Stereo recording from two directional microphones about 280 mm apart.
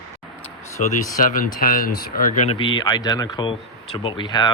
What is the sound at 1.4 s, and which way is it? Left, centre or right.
Speech, left.